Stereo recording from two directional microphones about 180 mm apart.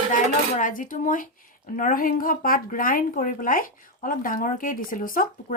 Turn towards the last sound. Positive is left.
turn(degrees=50)  # may be behind; listen again after turning